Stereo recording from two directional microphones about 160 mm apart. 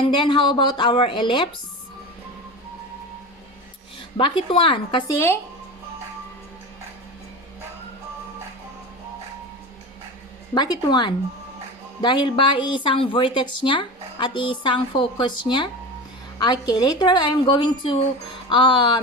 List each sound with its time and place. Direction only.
0.0 s speech: 30° left (ahead or behind)
4.2 s speech: 35° left (ahead or behind)
5.1 s speech: 15° left (ahead or behind)
10.5 s a woman's voice: 25° left (ahead or behind)